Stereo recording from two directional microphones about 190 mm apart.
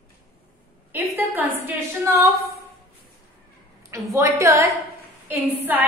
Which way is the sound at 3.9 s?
15° right (ahead or behind).